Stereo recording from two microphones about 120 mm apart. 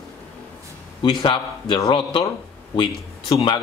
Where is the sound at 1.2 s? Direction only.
40° left (ahead or behind).